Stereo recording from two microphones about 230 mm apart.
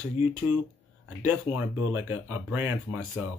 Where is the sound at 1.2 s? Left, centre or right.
Centre.